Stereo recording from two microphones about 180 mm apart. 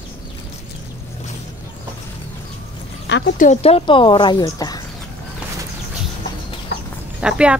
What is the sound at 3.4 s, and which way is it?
Speech, 35° left (ahead or behind).